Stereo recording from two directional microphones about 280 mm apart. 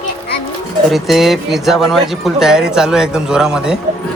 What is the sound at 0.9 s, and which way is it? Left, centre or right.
Speech, centre.